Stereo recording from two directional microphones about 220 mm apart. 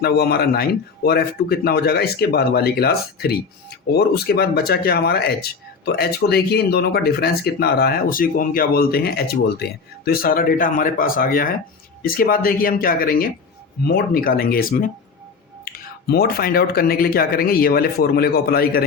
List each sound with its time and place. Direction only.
0.0 s speech: 45° left (ahead or behind)